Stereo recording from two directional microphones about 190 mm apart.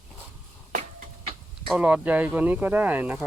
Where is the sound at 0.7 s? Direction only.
40° right (ahead or behind).